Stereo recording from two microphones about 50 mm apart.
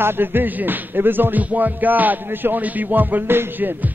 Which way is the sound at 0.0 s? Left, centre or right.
Right.